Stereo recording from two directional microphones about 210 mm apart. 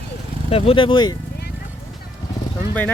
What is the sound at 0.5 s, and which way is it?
Speech, 25° left (ahead or behind).